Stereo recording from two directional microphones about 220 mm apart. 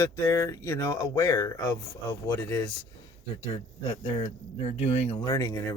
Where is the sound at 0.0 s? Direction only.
10° left (ahead or behind).